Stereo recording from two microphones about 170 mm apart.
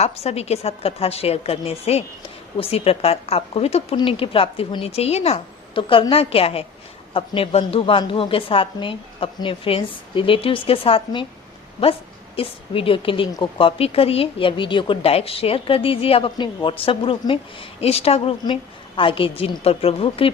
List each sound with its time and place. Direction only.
0.0 s a woman's voice: 40° left (ahead or behind)
12.4 s a woman's voice: 35° left (ahead or behind)